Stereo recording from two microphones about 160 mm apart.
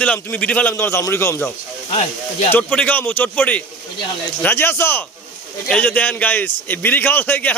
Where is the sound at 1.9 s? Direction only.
40° left (ahead or behind).